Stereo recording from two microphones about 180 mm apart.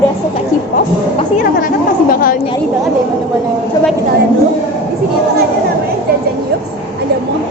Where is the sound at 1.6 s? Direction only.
50° left (ahead or behind).